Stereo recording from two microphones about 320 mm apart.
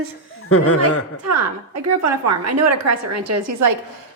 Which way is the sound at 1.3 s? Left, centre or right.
Right.